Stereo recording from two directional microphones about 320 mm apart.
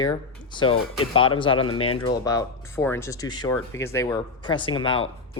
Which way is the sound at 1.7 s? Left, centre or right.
Left.